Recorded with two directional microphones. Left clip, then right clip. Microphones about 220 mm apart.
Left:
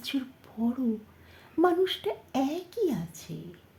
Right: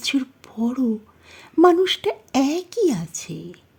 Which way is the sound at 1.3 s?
45° right (ahead or behind).